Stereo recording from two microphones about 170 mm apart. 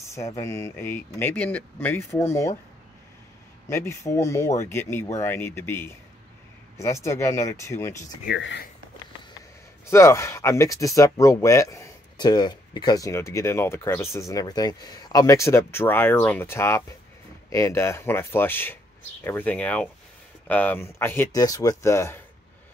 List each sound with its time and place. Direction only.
0.0 s a sound: 15° left (ahead or behind)
0.4 s speech: 15° left (ahead or behind)
3.6 s speech: 15° left (ahead or behind)
8.3 s speech: 80° left
9.8 s speech: 15° left (ahead or behind)